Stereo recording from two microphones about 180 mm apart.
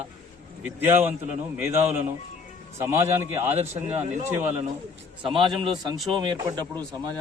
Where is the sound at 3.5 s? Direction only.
35° right (ahead or behind).